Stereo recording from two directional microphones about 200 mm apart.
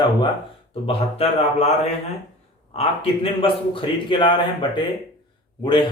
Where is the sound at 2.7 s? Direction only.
25° left (ahead or behind).